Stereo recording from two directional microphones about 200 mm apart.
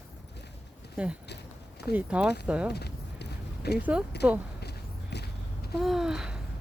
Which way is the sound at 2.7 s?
55° left (ahead or behind).